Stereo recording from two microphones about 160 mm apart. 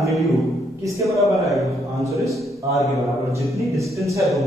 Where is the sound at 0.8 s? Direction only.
20° right (ahead or behind).